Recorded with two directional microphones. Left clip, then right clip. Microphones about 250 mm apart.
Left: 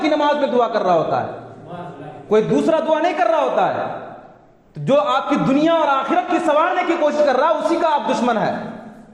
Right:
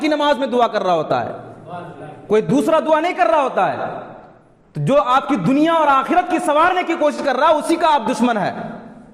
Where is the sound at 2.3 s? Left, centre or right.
Right.